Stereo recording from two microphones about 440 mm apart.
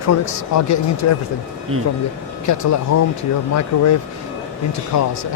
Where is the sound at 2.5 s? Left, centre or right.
Left.